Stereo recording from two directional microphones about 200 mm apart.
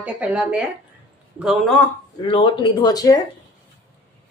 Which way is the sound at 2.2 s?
25° left (ahead or behind).